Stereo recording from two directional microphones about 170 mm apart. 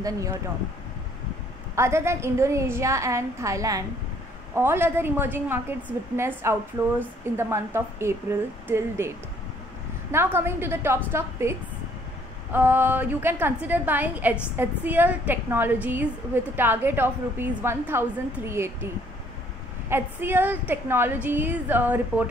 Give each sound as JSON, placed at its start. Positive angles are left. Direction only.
{"t": 0.0, "sound": "speech", "side_deg": -20}
{"t": 1.8, "sound": "a woman's voice", "side_deg": -15}
{"t": 10.1, "sound": "a woman's voice", "side_deg": -15}
{"t": 12.5, "sound": "a woman's voice", "side_deg": -10}
{"t": 19.9, "sound": "a woman's voice", "side_deg": -10}